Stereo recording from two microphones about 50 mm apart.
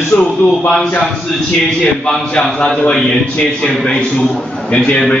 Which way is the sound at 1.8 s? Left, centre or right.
Centre.